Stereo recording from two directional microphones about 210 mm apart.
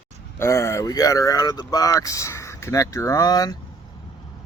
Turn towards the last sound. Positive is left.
turn(degrees=20)  # may be behind; listen again after turning